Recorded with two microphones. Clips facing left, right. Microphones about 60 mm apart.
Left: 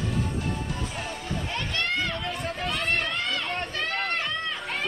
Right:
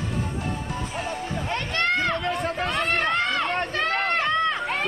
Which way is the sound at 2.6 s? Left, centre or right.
Right.